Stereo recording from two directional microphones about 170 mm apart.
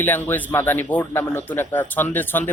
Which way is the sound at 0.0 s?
10° left (ahead or behind).